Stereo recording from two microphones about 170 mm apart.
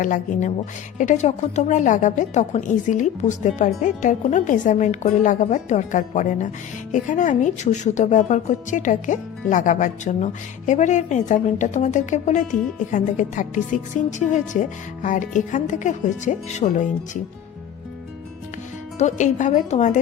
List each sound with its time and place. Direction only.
0.0 s a woman's voice: 50° left (ahead or behind)
18.9 s a woman's voice: 45° left (ahead or behind)